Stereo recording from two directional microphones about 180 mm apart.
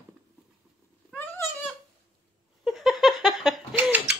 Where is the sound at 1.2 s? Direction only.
10° left (ahead or behind).